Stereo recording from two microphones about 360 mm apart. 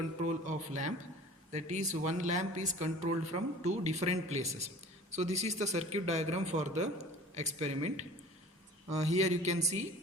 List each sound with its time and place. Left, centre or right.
0.3 s speech: centre